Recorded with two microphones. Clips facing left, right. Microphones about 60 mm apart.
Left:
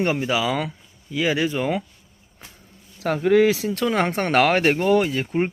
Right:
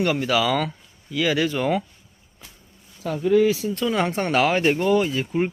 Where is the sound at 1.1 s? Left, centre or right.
Left.